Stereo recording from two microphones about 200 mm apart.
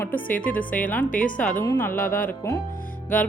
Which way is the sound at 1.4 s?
10° left (ahead or behind).